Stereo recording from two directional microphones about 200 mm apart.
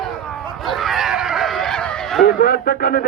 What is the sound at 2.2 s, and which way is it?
Speech, 50° left (ahead or behind).